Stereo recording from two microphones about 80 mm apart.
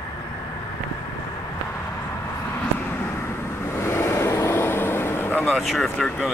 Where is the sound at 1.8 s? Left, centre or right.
Left.